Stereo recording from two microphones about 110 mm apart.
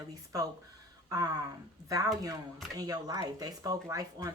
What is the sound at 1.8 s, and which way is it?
Speech, 35° right (ahead or behind).